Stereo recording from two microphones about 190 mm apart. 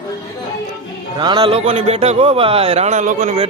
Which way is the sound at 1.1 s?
25° right (ahead or behind).